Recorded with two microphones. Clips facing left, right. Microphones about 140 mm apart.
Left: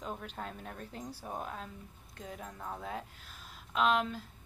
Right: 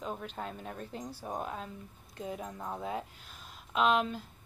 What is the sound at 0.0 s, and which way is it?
A woman's voice, 5° right (ahead or behind).